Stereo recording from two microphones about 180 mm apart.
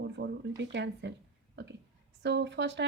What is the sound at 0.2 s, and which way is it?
Speech, 75° right (ahead or behind).